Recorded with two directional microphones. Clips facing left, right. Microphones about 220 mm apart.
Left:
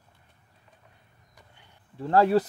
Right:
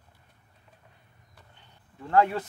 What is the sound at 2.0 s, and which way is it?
Speech, 35° left (ahead or behind).